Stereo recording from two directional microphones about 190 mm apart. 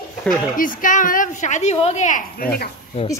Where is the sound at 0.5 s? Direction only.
45° left (ahead or behind).